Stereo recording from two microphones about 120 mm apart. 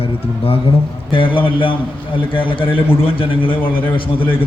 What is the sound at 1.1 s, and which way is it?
A man's voice, 45° left (ahead or behind).